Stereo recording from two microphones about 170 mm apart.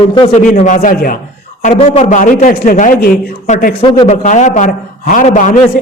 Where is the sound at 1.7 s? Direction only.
40° left (ahead or behind).